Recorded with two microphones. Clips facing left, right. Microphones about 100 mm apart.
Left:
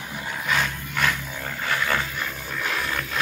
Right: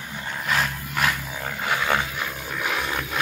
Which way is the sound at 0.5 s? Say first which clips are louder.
Right 1 dB; 5° right (ahead or behind).